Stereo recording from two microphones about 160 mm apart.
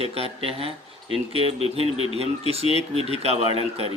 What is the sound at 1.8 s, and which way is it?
Speech, 35° left (ahead or behind).